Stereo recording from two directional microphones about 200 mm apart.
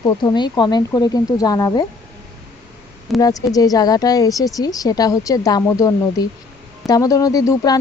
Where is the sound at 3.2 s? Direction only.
20° left (ahead or behind).